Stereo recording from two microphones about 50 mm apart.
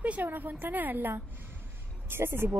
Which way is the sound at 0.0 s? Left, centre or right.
Right.